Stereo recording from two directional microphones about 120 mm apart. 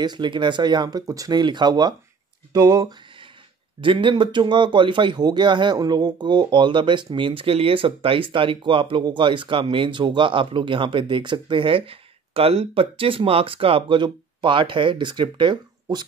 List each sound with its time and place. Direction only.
0.0 s speech: 40° right (ahead or behind)
3.8 s speech: 45° right (ahead or behind)